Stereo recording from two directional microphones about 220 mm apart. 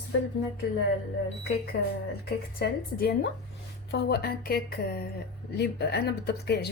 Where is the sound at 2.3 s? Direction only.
45° left (ahead or behind).